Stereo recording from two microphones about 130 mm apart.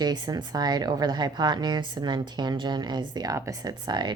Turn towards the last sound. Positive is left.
turn(degrees=-35)  # may be behind; listen again after turning